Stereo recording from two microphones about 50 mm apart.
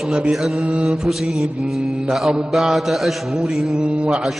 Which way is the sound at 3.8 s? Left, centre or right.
Right.